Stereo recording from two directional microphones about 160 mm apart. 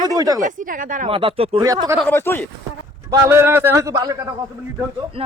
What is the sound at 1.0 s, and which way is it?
Speech, 35° right (ahead or behind).